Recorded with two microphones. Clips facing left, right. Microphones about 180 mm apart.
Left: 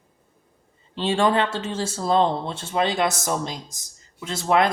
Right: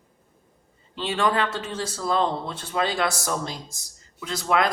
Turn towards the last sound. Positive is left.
turn(degrees=25)  # may be behind; listen again after turning